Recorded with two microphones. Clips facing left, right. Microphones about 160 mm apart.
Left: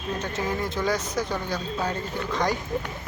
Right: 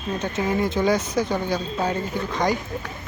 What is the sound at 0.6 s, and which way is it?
Speech, 25° right (ahead or behind).